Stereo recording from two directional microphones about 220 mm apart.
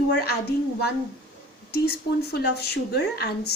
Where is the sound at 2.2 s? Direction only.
45° left (ahead or behind).